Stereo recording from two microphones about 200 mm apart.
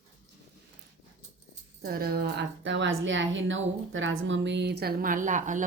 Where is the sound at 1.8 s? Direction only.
50° right (ahead or behind).